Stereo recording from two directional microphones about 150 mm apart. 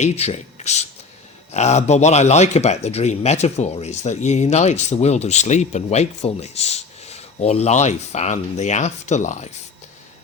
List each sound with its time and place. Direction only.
0.0 s speech: 45° left (ahead or behind)